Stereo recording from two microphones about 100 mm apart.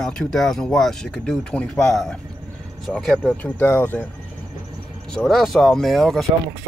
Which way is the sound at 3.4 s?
20° left (ahead or behind).